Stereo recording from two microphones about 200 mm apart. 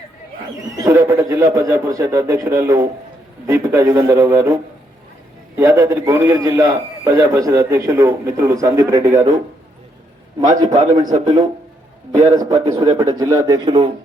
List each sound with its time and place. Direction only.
0.8 s a man's voice: 15° right (ahead or behind)
5.5 s a man's voice: 15° right (ahead or behind)
10.4 s a man's voice: 20° right (ahead or behind)